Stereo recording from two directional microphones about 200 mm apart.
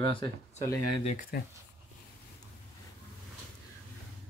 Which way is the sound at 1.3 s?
50° left (ahead or behind).